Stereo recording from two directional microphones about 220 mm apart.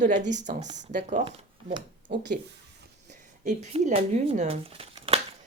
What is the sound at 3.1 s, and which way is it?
Speech, 35° right (ahead or behind).